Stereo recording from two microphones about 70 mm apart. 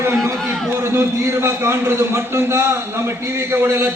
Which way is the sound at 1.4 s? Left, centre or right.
Right.